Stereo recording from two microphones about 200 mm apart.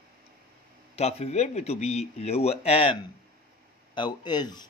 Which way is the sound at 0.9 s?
30° left (ahead or behind).